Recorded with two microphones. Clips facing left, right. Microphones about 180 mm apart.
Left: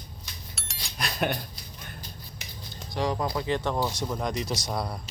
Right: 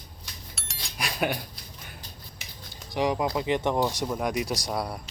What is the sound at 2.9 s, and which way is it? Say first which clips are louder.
Speech: right 2 dB; 15° right (ahead or behind).